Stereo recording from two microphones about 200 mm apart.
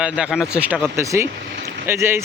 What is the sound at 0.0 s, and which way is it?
Speech, 5° right (ahead or behind).